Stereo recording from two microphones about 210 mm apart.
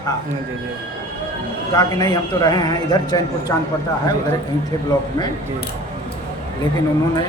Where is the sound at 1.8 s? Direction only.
20° left (ahead or behind).